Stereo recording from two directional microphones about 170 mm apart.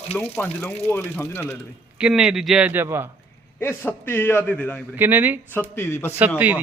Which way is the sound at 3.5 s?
15° left (ahead or behind).